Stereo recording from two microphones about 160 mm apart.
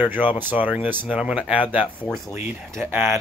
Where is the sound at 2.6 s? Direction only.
15° right (ahead or behind).